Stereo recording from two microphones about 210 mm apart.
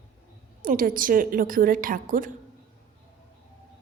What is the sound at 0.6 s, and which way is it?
A woman's voice, 40° right (ahead or behind).